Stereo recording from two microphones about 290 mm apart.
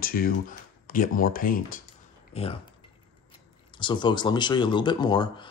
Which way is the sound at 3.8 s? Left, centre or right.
Centre.